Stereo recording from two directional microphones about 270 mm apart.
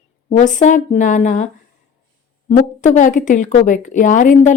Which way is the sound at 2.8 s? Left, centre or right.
Left.